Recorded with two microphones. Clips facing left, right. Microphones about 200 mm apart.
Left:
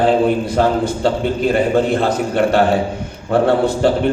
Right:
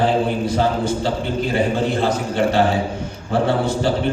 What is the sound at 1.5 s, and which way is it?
A man's voice, 55° left (ahead or behind).